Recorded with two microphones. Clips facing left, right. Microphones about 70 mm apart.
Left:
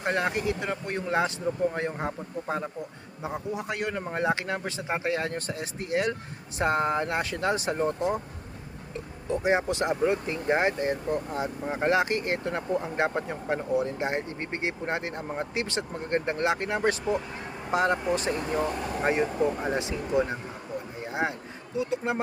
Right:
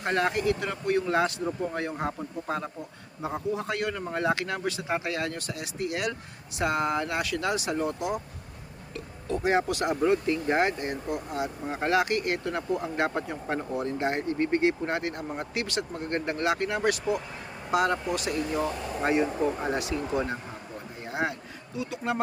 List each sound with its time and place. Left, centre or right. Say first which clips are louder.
0.0 s speech: right 1 dB; centre; by 8.2 s left
9.3 s speech: even; centre
19.7 s speech: left 2 dB; left
21.1 s a sound: even; left
21.8 s speech: left 3 dB; left